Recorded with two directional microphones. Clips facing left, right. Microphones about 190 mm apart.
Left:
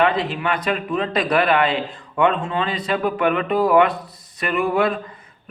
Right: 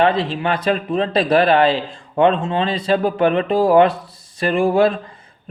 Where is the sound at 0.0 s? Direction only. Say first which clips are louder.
Right 3 dB; 30° right (ahead or behind).